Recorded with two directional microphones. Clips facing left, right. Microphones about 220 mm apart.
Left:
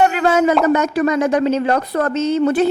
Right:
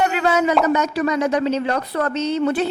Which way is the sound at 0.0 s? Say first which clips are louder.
Left 4 dB; 50° left (ahead or behind).